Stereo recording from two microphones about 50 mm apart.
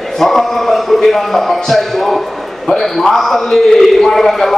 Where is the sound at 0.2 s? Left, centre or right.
Centre.